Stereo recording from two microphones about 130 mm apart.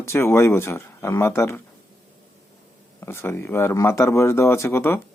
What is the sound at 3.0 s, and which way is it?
Speech, 20° left (ahead or behind).